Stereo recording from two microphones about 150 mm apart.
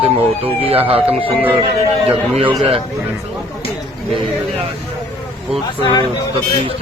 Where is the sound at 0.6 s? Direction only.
40° right (ahead or behind).